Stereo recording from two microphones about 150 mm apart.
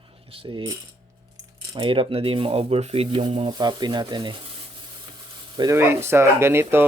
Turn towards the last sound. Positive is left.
turn(degrees=-15)  # may be behind; listen again after turning